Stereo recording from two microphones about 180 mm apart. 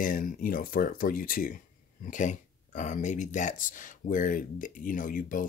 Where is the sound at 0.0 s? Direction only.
50° left (ahead or behind).